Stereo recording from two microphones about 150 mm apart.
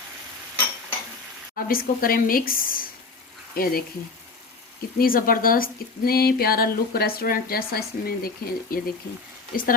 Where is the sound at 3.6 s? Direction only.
90° left.